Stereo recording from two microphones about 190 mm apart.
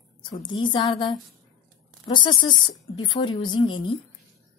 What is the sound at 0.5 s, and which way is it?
A woman's voice, 25° left (ahead or behind).